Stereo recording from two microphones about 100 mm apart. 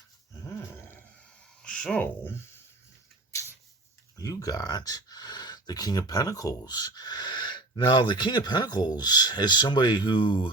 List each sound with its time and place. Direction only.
1.6 s speech: 10° left (ahead or behind)
4.2 s speech: 35° left (ahead or behind); by 10.5 s 55° left (ahead or behind)